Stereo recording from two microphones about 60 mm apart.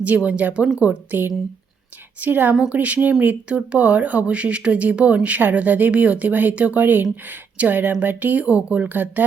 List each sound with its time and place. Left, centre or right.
0.0 s speech: right
2.2 s speech: right